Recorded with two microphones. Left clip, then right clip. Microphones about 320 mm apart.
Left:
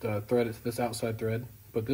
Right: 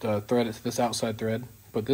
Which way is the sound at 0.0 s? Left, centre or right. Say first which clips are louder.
Right 3 dB; right.